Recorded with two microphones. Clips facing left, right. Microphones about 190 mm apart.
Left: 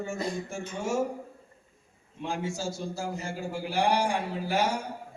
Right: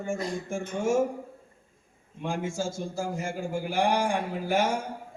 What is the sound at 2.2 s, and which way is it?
A man's voice, 50° right (ahead or behind).